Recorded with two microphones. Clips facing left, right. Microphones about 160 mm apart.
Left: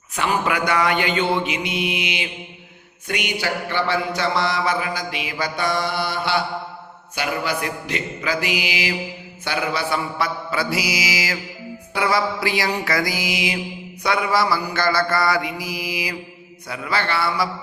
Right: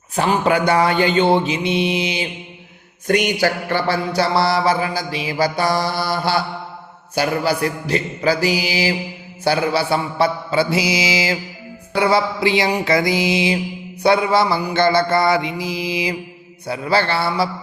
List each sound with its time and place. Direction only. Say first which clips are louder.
0.2 s mantra: right 5 dB; 30° right (ahead or behind)
3.1 s mantra: right 8 dB; 45° right (ahead or behind); by 17.5 s 30° right (ahead or behind)